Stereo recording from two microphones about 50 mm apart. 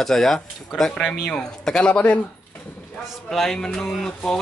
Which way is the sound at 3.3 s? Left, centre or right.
Centre.